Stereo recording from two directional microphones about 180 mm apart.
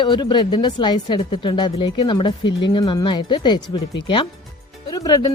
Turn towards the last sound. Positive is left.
turn(degrees=20)  # may be behind; listen again after turning